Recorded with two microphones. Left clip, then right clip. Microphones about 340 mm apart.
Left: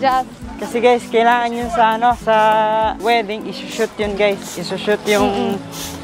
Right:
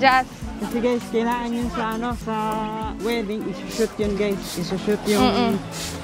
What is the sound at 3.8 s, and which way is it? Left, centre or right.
Speech, left.